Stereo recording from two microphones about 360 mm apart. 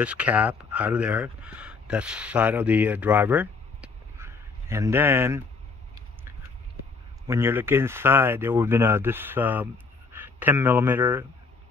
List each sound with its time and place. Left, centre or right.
0.0 s speech: centre
7.2 s speech: centre